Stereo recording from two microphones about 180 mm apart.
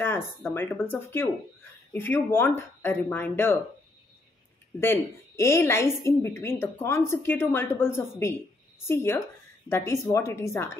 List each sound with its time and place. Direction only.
0.0 s a woman's voice: 10° left (ahead or behind)
4.7 s a woman's voice: 15° left (ahead or behind)